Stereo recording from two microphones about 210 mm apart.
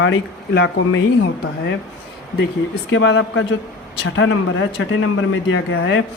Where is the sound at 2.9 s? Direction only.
60° left (ahead or behind).